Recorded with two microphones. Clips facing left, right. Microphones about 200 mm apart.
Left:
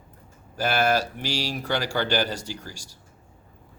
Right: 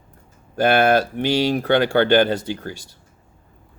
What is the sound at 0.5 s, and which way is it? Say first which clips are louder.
Speech: right 7 dB; 55° right (ahead or behind).